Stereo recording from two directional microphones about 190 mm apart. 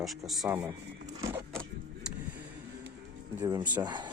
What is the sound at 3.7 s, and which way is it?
Speech, 20° right (ahead or behind).